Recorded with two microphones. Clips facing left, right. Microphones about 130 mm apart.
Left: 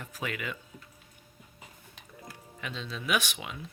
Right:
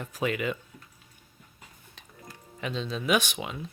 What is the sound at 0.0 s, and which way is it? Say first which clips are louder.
Speech: right 7 dB; 25° right (ahead or behind).